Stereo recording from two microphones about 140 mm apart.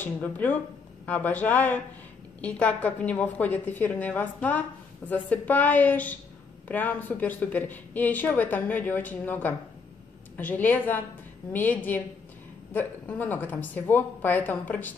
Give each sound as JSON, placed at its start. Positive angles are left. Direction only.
{"t": 0.0, "sound": "a woman's voice", "side_deg": 10}